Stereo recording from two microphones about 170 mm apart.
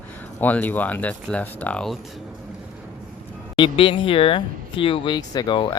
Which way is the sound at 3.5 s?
30° left (ahead or behind).